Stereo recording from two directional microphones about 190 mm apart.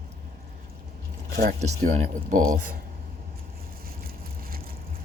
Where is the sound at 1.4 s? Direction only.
50° right (ahead or behind).